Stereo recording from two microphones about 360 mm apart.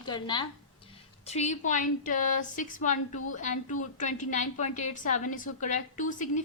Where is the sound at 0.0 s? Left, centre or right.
Centre.